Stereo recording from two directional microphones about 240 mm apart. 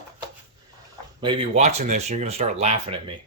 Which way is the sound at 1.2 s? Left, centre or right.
Right.